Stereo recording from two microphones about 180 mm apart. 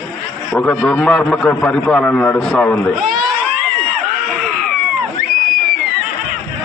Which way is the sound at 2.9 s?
Centre (ahead or behind).